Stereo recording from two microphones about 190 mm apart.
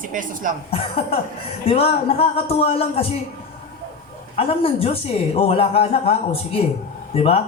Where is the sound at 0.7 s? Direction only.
30° left (ahead or behind).